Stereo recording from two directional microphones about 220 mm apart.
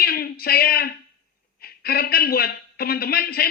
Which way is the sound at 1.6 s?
45° left (ahead or behind).